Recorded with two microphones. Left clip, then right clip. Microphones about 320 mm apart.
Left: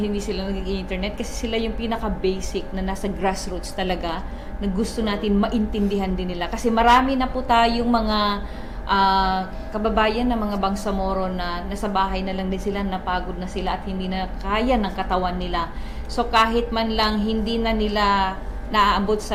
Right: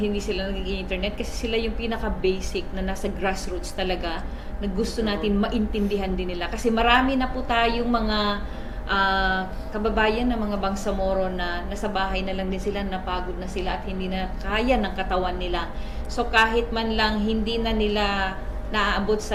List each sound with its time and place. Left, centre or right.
0.0 s a woman's voice: left